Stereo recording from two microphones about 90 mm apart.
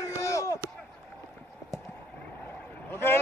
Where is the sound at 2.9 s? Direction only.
25° left (ahead or behind).